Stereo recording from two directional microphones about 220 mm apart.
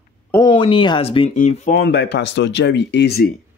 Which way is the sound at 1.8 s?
50° left (ahead or behind).